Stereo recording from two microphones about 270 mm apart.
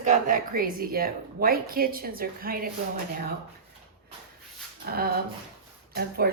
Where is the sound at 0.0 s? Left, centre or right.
Right.